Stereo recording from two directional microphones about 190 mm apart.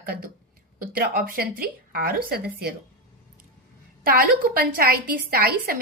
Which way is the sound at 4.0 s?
50° right (ahead or behind).